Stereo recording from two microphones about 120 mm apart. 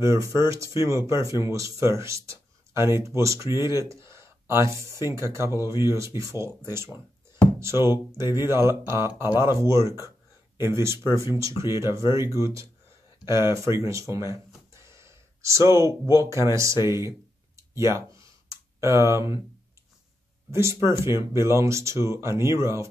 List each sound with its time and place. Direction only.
0.0 s speech: 25° right (ahead or behind)
17.6 s clicking: 25° right (ahead or behind)
20.5 s speech: 25° right (ahead or behind)